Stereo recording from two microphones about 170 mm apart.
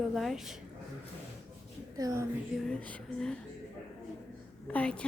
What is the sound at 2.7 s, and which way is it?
Speech, 10° left (ahead or behind).